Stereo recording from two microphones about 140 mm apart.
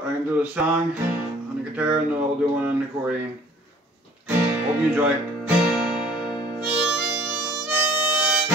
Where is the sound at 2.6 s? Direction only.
10° right (ahead or behind).